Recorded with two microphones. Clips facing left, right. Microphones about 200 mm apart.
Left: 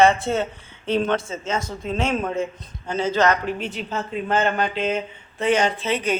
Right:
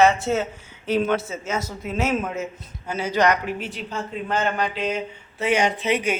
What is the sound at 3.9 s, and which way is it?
Speech, 25° left (ahead or behind).